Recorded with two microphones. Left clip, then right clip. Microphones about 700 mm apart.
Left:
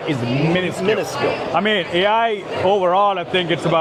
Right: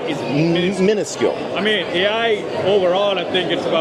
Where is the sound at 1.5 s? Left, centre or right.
Left.